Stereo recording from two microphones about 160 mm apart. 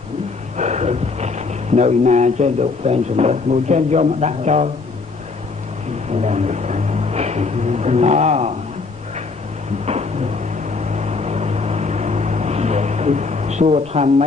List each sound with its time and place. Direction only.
0.6 s speech: 45° right (ahead or behind)
6.0 s vehicle: 45° right (ahead or behind)
9.8 s vehicle: 40° right (ahead or behind)